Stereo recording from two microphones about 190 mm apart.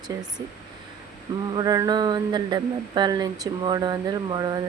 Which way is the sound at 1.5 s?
20° right (ahead or behind).